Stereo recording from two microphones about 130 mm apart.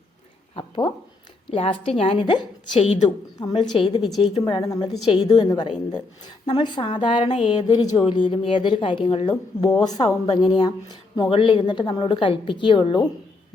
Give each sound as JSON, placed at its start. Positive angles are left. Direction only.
{"t": 0.5, "sound": "a sound", "side_deg": 35}
{"t": 1.5, "sound": "a woman's voice", "side_deg": 45}
{"t": 9.8, "sound": "a woman's voice", "side_deg": 30}